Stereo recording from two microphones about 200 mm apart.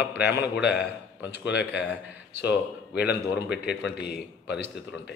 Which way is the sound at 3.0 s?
55° left (ahead or behind).